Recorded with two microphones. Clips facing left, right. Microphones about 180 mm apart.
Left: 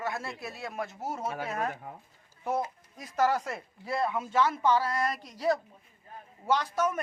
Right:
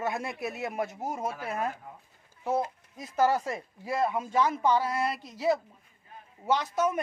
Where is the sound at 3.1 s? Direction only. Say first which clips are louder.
Right 2 dB; 10° right (ahead or behind).